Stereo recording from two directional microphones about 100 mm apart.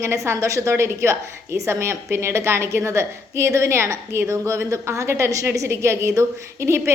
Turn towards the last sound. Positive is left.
turn(degrees=-25)  # may be behind; listen again after turning